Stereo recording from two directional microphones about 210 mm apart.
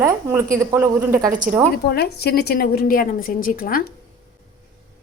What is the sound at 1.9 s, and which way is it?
A woman's voice, 50° left (ahead or behind).